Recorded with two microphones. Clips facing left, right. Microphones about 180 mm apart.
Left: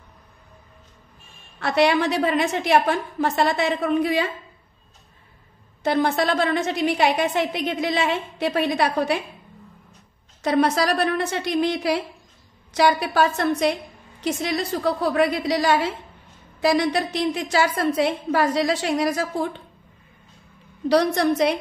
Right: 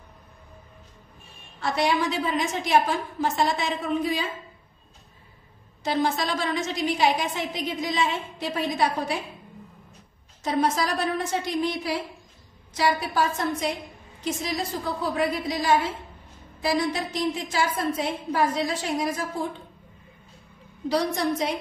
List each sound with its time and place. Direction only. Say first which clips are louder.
1.6 s a woman's voice: left 5 dB; 65° left (ahead or behind)
5.8 s a woman's voice: left 4 dB; 60° left (ahead or behind)
10.4 s a woman's voice: left 5 dB; 70° left (ahead or behind)
20.9 s a woman's voice: left 6 dB; 70° left (ahead or behind)